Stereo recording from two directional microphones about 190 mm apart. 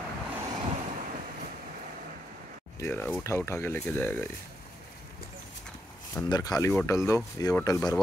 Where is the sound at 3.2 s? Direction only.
15° left (ahead or behind).